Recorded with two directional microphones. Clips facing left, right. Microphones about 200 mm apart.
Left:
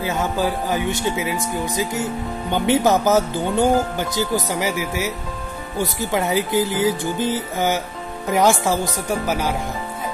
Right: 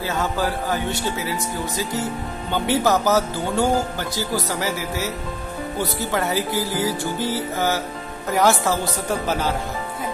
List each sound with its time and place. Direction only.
0.0 s speech: 20° left (ahead or behind)
2.5 s speech: 20° left (ahead or behind)